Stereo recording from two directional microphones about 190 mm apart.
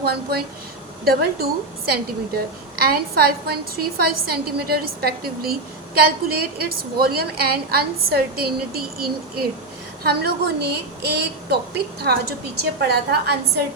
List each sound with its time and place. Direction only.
0.0 s a woman's voice: 55° right (ahead or behind)